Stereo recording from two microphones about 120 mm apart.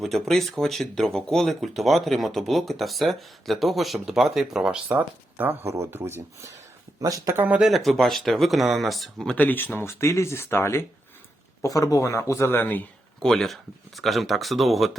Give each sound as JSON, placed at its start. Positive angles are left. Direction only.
{"t": 0.0, "sound": "speech", "side_deg": 0}
{"t": 4.9, "sound": "speech", "side_deg": -15}
{"t": 7.4, "sound": "speech", "side_deg": -10}
{"t": 7.7, "sound": "speech", "side_deg": 0}
{"t": 13.2, "sound": "speech", "side_deg": 5}